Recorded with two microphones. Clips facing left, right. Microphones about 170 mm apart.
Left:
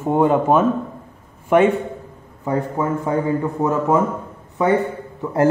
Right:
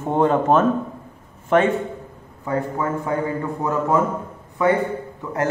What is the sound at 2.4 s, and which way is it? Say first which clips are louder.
A man's voice: left 2 dB; 20° left (ahead or behind).